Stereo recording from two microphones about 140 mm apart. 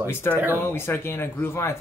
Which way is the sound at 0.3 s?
15° right (ahead or behind).